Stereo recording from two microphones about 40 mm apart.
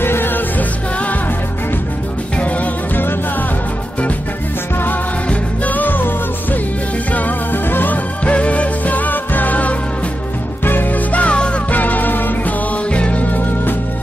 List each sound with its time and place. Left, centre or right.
0.0 s music: left
2.3 s music: left
5.7 s music: left
8.3 s music: left
10.6 s music: left
11.1 s music: left
11.7 s music: left
12.9 s music: left